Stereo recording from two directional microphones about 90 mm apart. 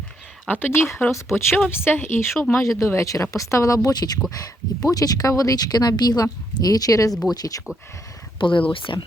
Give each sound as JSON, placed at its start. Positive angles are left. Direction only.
{"t": 0.4, "sound": "speech", "side_deg": 20}
{"t": 7.1, "sound": "speech", "side_deg": 0}
{"t": 7.3, "sound": "speech", "side_deg": 45}
{"t": 8.4, "sound": "speech", "side_deg": 70}